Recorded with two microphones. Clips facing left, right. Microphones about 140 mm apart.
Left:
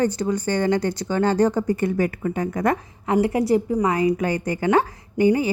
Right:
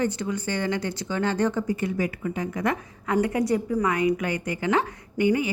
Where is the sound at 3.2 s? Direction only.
30° left (ahead or behind).